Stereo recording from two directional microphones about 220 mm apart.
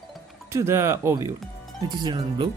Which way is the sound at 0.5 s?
15° right (ahead or behind).